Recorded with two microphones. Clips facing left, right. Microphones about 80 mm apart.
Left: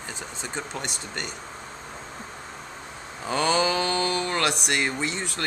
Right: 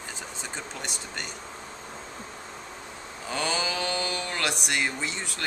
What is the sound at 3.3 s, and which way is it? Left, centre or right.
Speech, left.